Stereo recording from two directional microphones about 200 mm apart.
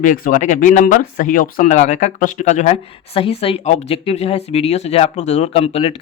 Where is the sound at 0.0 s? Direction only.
40° left (ahead or behind).